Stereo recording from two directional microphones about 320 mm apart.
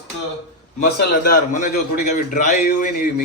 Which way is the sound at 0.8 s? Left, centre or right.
Left.